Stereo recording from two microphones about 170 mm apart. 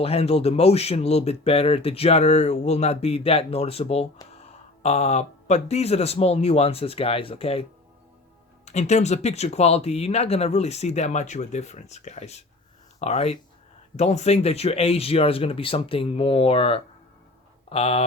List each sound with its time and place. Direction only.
0.0 s speech: 35° left (ahead or behind)